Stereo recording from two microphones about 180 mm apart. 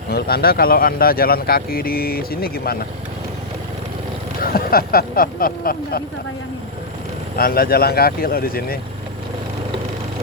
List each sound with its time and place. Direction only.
0.1 s speech: 60° left (ahead or behind)
4.4 s speech: 55° left (ahead or behind)
7.3 s speech: 55° left (ahead or behind)